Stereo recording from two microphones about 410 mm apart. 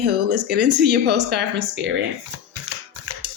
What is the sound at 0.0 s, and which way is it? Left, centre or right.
Speech, right.